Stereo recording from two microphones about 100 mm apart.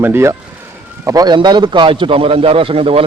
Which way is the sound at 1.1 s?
35° right (ahead or behind).